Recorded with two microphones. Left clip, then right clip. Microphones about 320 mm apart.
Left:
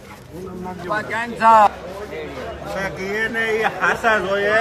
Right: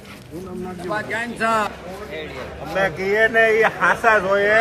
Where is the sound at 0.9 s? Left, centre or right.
Left.